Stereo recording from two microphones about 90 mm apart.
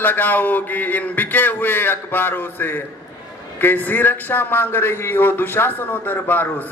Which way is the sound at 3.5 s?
20° left (ahead or behind).